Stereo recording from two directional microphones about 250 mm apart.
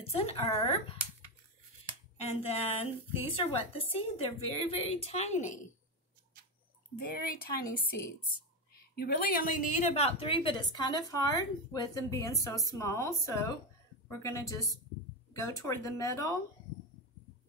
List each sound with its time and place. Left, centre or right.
0.0 s a woman's voice: left
2.1 s a woman's voice: left
7.0 s speech: left
8.7 s a woman's voice: left; by 16.3 s centre